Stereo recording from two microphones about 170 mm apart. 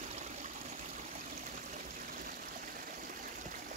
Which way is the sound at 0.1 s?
45° right (ahead or behind).